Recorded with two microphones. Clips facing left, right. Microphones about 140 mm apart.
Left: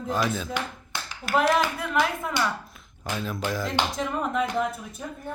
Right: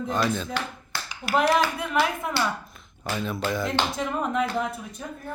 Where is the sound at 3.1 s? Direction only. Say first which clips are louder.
Right 2 dB; centre (ahead or behind).